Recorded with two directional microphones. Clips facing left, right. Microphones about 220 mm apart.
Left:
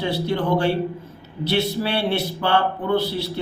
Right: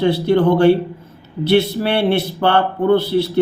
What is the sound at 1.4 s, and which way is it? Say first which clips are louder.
Speech: right 7 dB; 55° right (ahead or behind).